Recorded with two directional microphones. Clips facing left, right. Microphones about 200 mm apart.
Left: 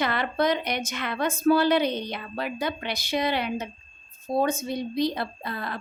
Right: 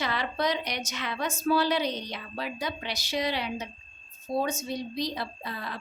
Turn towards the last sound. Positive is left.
turn(degrees=55)  # may be behind; listen again after turning